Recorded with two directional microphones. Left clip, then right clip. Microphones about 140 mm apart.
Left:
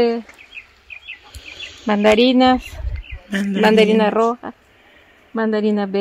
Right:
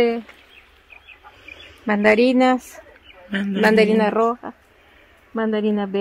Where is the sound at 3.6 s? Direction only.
70° left (ahead or behind).